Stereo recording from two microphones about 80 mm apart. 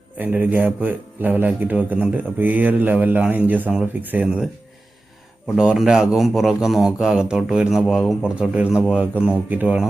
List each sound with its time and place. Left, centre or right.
0.2 s speech: right
5.5 s speech: centre
8.4 s speech: centre